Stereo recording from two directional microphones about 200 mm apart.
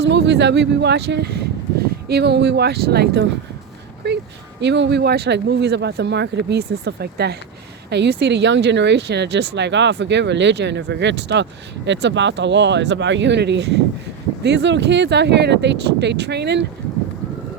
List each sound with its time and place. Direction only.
0.0 s speech: 60° right (ahead or behind)